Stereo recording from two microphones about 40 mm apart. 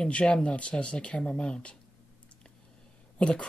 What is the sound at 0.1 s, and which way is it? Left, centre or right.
Speech, left.